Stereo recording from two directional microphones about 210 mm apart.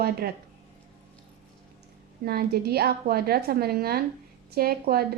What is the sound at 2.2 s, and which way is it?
Speech, 45° right (ahead or behind).